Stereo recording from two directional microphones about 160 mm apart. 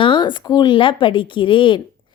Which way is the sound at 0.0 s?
30° left (ahead or behind).